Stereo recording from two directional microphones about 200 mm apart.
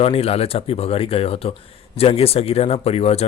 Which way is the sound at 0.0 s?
30° left (ahead or behind).